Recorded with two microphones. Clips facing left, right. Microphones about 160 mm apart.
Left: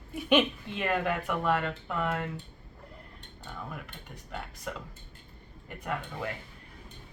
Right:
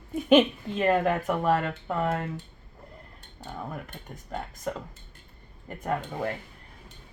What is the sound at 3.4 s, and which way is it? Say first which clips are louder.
Speech: right 5 dB; 40° right (ahead or behind).